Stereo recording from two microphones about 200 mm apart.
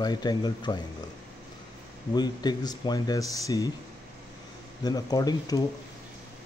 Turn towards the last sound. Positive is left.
turn(degrees=20)  # may be behind; listen again after turning